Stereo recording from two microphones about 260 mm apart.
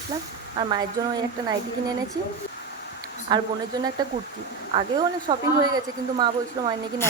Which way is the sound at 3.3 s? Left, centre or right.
Centre.